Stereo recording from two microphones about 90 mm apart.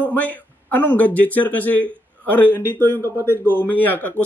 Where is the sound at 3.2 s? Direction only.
20° right (ahead or behind).